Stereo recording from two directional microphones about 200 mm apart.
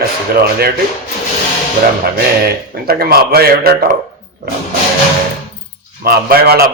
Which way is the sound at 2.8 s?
50° right (ahead or behind).